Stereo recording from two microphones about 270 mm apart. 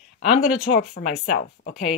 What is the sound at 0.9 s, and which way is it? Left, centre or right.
Speech, left.